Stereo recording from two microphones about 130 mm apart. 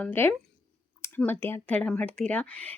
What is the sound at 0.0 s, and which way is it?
Speech, 15° left (ahead or behind).